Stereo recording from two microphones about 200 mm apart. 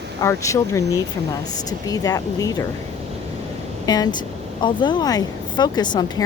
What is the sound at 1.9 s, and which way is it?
Speech, 20° left (ahead or behind).